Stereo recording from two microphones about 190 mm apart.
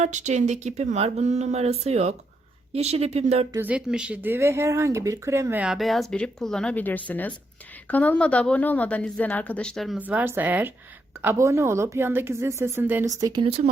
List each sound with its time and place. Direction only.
0.0 s speech: 40° right (ahead or behind)
3.5 s a woman's voice: 10° right (ahead or behind); by 13.7 s 30° right (ahead or behind)